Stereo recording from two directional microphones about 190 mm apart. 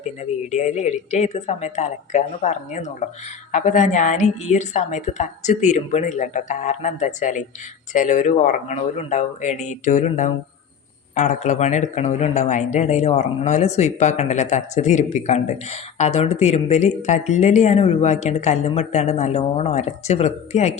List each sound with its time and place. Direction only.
0.5 s speech: 40° left (ahead or behind)